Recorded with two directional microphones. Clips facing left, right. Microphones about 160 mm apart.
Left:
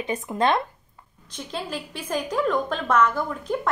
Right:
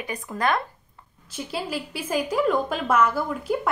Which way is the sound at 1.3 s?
5° right (ahead or behind).